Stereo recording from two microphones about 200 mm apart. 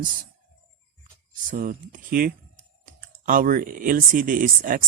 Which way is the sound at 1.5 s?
40° right (ahead or behind).